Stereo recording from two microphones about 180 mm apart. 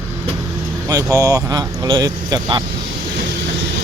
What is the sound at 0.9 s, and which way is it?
Speech, 20° right (ahead or behind).